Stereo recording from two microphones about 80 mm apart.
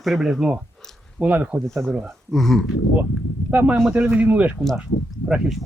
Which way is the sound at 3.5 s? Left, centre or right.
Centre.